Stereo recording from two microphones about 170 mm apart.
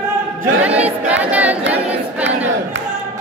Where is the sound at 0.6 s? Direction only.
10° right (ahead or behind).